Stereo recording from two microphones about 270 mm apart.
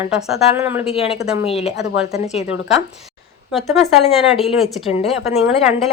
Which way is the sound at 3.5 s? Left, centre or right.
Centre.